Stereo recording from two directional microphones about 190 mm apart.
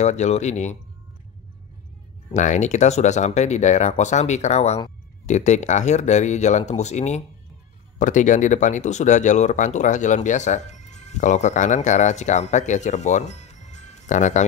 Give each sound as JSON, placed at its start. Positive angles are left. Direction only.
{"t": 0.0, "sound": "speech", "side_deg": 35}
{"t": 2.3, "sound": "speech", "side_deg": 40}